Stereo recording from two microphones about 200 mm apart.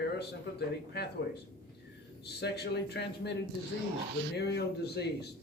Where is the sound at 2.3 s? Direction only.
55° left (ahead or behind).